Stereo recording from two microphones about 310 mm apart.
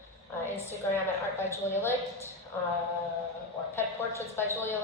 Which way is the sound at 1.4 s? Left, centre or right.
Centre.